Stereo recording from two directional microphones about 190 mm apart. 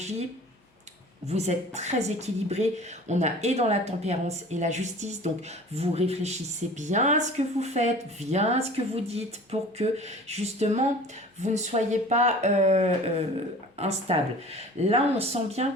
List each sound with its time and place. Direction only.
1.3 s speech: 35° right (ahead or behind)